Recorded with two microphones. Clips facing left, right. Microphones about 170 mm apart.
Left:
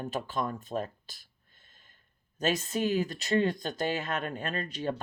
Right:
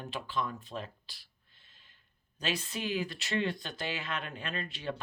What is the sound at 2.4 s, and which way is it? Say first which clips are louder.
Speech: left 7 dB; 45° left (ahead or behind).